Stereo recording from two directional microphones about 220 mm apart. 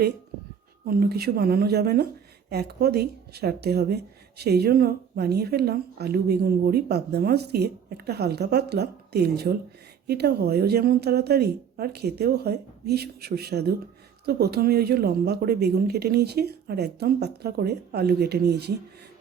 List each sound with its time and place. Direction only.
0.9 s a woman's voice: 45° right (ahead or behind)